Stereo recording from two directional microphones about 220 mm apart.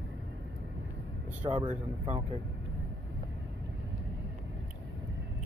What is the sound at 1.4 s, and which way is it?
Speech, 25° right (ahead or behind).